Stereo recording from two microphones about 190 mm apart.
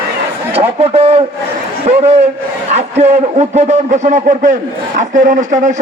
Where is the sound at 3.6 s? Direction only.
35° right (ahead or behind).